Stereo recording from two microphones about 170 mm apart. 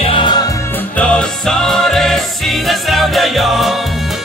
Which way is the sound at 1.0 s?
5° left (ahead or behind).